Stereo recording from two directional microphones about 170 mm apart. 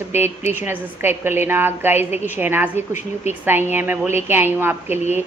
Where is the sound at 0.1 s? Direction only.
15° right (ahead or behind).